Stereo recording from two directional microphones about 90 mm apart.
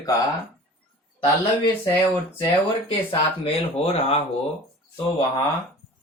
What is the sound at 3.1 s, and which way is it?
Speech, 90° left.